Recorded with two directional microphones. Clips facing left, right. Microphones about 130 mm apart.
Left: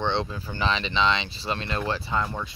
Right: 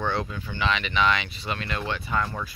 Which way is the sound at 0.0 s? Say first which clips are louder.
Left 1 dB; 25° left (ahead or behind).